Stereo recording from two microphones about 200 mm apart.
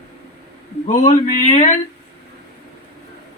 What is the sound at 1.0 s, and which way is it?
Speech, 40° left (ahead or behind).